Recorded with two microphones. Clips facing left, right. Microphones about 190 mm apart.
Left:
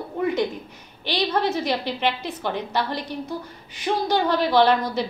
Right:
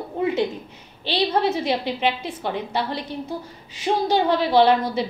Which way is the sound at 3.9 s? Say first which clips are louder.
Right 2 dB; 25° right (ahead or behind).